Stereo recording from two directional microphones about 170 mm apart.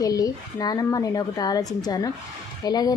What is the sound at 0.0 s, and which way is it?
Speech, 20° left (ahead or behind).